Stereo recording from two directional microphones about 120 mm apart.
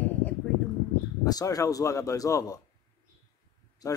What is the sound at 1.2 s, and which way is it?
A man's voice, 30° left (ahead or behind).